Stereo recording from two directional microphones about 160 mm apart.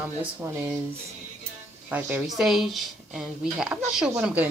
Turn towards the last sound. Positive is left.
turn(degrees=-10)  # may be behind; listen again after turning